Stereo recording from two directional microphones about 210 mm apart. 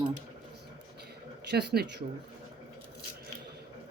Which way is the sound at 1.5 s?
50° right (ahead or behind).